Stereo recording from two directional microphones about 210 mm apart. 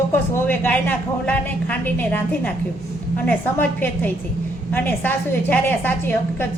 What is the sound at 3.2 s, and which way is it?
A woman's voice, 10° left (ahead or behind).